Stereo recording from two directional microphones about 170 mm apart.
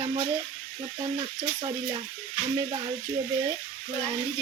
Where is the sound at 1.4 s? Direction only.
30° right (ahead or behind).